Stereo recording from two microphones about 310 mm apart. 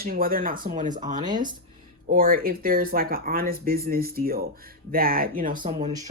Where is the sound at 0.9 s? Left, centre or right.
Centre.